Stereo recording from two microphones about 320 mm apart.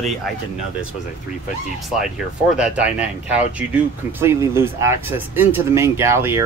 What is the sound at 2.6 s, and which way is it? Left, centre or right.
Speech, centre.